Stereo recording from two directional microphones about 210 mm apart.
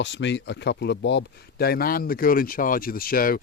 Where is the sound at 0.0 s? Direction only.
55° left (ahead or behind).